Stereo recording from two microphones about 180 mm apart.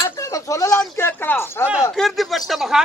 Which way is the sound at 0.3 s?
20° left (ahead or behind).